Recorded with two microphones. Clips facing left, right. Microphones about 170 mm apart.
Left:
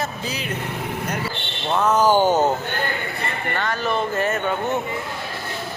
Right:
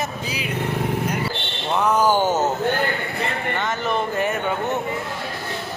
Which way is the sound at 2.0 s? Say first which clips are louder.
Left 2 dB; 10° left (ahead or behind).